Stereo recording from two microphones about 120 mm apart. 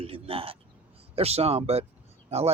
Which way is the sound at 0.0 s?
50° right (ahead or behind).